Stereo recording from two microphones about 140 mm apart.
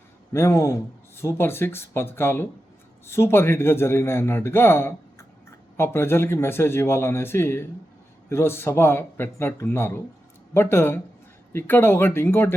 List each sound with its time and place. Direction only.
0.3 s a man's voice: 20° left (ahead or behind)